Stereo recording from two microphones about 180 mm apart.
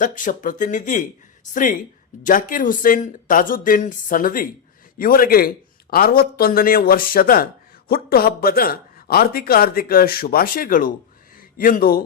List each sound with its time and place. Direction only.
0.0 s speech: 45° left (ahead or behind)
2.2 s speech: 50° left (ahead or behind)